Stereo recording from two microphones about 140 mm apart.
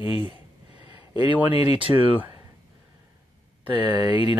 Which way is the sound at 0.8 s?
40° left (ahead or behind).